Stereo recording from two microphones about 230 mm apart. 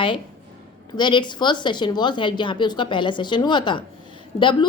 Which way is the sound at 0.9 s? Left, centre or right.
Centre.